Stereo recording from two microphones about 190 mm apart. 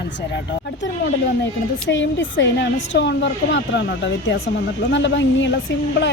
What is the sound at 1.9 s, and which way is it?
A woman's voice, 75° left (ahead or behind).